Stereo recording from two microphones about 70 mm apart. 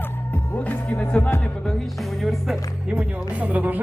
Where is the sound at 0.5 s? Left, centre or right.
Left.